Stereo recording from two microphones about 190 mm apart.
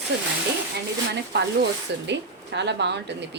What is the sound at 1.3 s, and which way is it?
A woman's voice, 60° right (ahead or behind).